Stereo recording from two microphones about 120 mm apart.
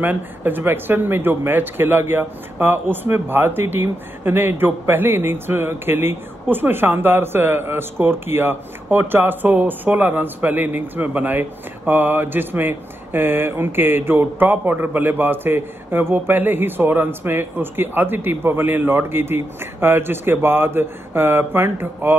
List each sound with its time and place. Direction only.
0.0 s a man's voice: 15° right (ahead or behind)